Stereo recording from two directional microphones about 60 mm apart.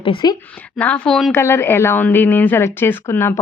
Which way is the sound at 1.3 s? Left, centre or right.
Left.